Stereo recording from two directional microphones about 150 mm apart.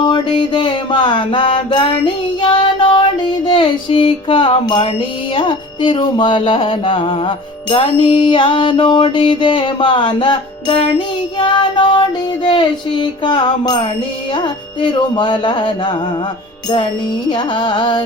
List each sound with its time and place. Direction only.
0.0 s music: 30° left (ahead or behind)
2.4 s child singing: 30° left (ahead or behind)
3.4 s music: 30° left (ahead or behind)
17.3 s music: 30° left (ahead or behind)